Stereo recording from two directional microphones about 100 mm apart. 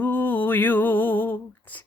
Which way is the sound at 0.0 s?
20° left (ahead or behind).